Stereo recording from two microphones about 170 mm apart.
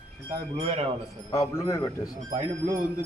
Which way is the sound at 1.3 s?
20° left (ahead or behind).